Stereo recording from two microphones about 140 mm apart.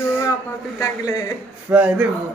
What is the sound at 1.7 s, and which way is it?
Speech, 15° right (ahead or behind).